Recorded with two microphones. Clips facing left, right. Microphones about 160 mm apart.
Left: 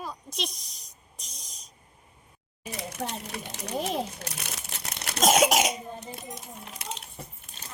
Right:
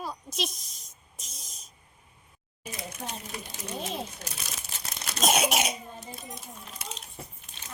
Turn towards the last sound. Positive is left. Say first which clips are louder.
# left 3 dB
turn(degrees=65)  # may be behind; listen again after turning